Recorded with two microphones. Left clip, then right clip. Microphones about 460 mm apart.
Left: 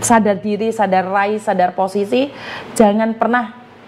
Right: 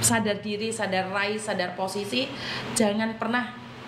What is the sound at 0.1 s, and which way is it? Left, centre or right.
A woman's voice, left.